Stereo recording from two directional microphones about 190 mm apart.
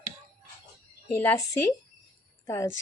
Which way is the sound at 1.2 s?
15° left (ahead or behind).